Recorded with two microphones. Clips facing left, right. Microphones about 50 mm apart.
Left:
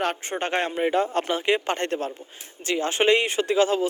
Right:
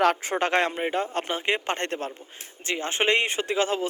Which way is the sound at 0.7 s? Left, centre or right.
Centre.